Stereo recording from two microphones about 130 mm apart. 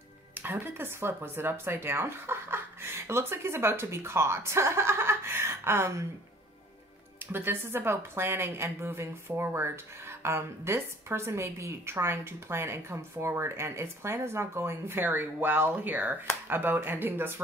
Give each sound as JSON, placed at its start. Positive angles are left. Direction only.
{"t": 0.3, "sound": "a woman's voice", "side_deg": -15}
{"t": 7.3, "sound": "a woman's voice", "side_deg": -15}